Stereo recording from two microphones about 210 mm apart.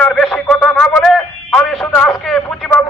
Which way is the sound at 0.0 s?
5° left (ahead or behind).